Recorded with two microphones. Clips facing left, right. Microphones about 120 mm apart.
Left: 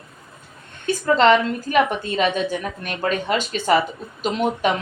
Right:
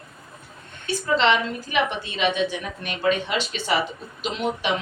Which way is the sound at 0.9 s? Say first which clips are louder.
Left 5 dB; 45° left (ahead or behind).